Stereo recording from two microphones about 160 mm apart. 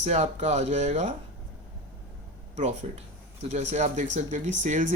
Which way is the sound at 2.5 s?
45° right (ahead or behind).